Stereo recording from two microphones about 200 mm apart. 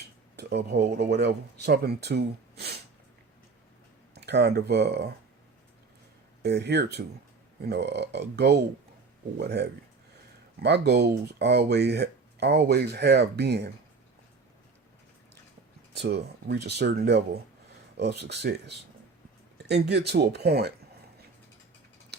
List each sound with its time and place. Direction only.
0.3 s speech: 60° right (ahead or behind)
4.1 s speech: 55° right (ahead or behind)
6.4 s speech: 55° right (ahead or behind)
16.0 s speech: 55° right (ahead or behind)